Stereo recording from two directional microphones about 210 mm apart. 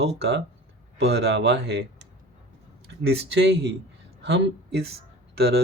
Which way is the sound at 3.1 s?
55° right (ahead or behind).